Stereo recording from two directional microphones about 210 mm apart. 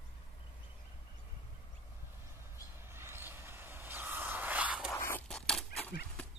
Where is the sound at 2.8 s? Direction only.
10° right (ahead or behind).